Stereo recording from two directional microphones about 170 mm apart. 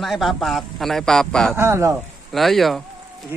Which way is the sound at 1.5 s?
15° right (ahead or behind).